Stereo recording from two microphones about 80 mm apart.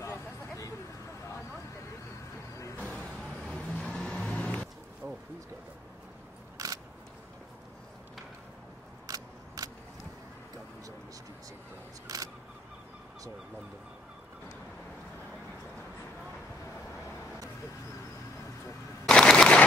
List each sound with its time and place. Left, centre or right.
2.8 s vehicle: centre
5.0 s a sound: right
6.6 s single-lens reflex camera: right
9.0 s a sound: right
12.1 s single-lens reflex camera: right
19.0 s machine gun: centre